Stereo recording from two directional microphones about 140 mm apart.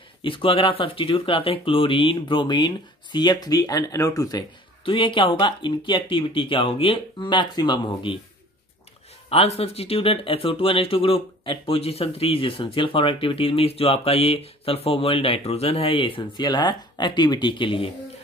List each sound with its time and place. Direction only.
0.2 s speech: 40° left (ahead or behind)
9.3 s speech: 45° left (ahead or behind)